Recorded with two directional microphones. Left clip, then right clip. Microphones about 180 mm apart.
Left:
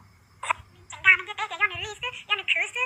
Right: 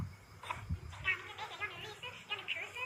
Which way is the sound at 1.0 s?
45° left (ahead or behind).